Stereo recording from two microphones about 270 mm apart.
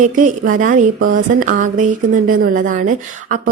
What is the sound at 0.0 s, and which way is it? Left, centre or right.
Speech, right.